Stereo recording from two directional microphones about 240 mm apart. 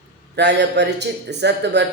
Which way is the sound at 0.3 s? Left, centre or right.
Right.